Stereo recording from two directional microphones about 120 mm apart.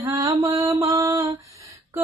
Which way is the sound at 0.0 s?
25° right (ahead or behind).